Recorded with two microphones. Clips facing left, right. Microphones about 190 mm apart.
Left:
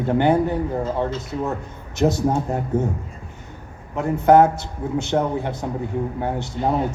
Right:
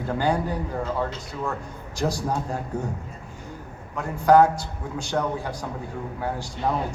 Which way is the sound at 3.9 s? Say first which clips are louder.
Left 3 dB; 20° left (ahead or behind).